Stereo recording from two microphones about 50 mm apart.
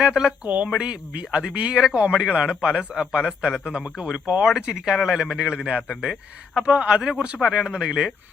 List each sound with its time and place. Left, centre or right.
0.0 s speech: centre
0.4 s a woman's voice: right
0.8 s speech: centre